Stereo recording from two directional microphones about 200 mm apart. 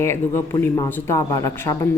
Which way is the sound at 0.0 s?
15° left (ahead or behind).